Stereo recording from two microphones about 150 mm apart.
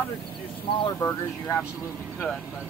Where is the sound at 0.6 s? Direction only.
30° left (ahead or behind).